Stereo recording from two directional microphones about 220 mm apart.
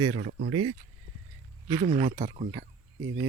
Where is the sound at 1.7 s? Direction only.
35° right (ahead or behind).